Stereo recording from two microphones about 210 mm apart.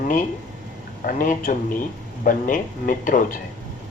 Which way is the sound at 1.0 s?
45° left (ahead or behind).